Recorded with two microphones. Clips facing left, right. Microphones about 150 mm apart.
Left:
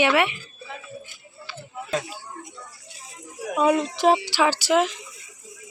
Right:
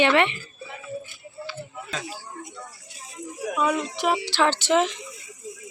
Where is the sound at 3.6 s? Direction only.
30° left (ahead or behind).